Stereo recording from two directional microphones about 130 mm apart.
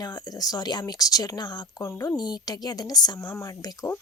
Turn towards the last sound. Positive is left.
turn(degrees=20)  # may be behind; listen again after turning